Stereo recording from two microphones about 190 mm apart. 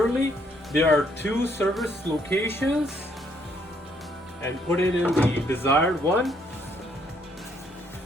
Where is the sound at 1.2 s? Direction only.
10° left (ahead or behind).